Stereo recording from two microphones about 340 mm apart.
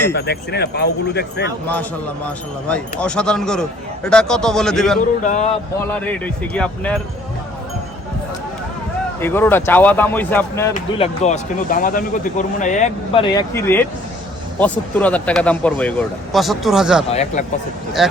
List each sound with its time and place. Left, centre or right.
0.1 s speech: left
1.6 s speech: centre
5.2 s speech: left
5.8 s speech: centre
9.2 s speech: centre
10.8 s speech: centre
17.1 s speech: centre
18.0 s speech: centre